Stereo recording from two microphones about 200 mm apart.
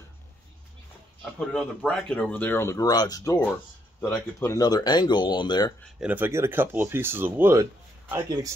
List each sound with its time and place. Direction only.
1.4 s speech: 5° left (ahead or behind); by 5.7 s 20° left (ahead or behind)
5.9 s speech: 10° right (ahead or behind)